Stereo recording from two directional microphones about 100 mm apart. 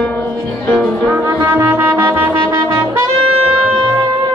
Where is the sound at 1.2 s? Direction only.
30° right (ahead or behind).